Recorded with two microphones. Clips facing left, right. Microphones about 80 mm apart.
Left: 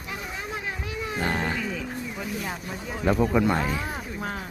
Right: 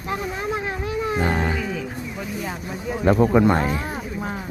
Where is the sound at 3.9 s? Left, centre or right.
Centre.